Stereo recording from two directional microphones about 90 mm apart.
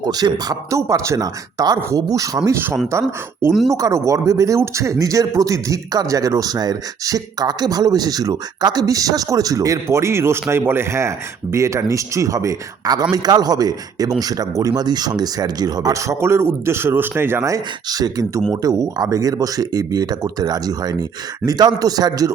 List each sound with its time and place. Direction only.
0.0 s speech: 50° right (ahead or behind)
0.8 s speech: 35° right (ahead or behind)
17.4 s speech: 40° right (ahead or behind)